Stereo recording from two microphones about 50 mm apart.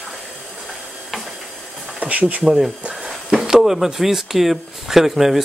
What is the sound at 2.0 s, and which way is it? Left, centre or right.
Speech, right.